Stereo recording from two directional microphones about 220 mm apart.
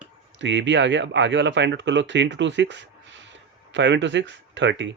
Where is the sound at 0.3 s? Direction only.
55° right (ahead or behind).